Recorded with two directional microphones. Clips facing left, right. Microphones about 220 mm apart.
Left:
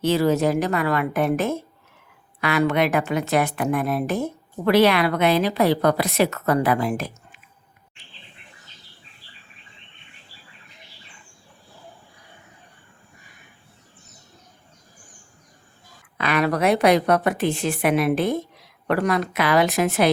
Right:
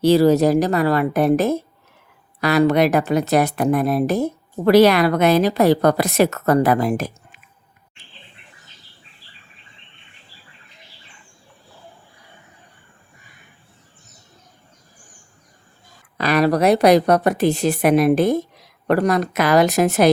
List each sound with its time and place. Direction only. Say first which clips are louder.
0.0 s speech: right 6 dB; 35° right (ahead or behind)
16.1 s speech: right 5 dB; 40° right (ahead or behind)